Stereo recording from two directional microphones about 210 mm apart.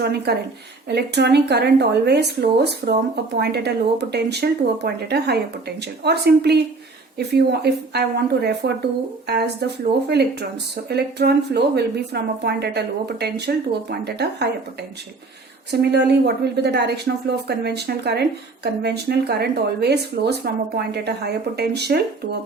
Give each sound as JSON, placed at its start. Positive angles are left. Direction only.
{"t": 0.0, "sound": "a woman's voice", "side_deg": -50}